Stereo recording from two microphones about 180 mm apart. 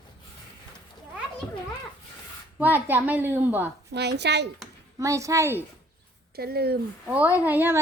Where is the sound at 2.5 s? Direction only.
10° right (ahead or behind).